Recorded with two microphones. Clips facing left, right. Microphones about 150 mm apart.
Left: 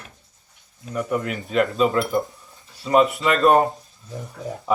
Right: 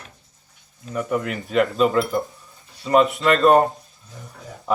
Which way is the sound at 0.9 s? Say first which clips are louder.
Right 1 dB; centre (ahead or behind).